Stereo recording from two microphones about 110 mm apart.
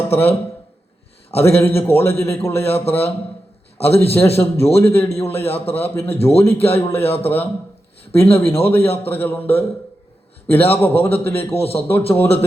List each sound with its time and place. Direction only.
0.1 s a man's voice: 20° left (ahead or behind)
1.4 s a man's voice: 20° left (ahead or behind)